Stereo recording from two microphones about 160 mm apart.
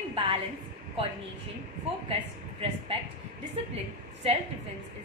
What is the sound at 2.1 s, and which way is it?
Speech, 40° right (ahead or behind).